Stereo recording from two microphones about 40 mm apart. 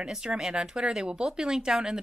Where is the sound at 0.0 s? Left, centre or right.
Right.